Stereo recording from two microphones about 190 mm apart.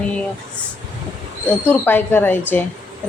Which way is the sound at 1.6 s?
10° left (ahead or behind).